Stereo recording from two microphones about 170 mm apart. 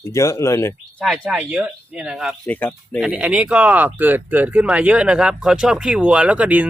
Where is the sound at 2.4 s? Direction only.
10° left (ahead or behind).